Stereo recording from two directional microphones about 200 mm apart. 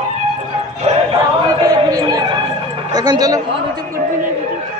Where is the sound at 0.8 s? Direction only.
30° right (ahead or behind).